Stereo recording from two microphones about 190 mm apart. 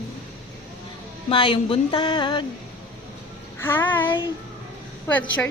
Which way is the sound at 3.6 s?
10° left (ahead or behind).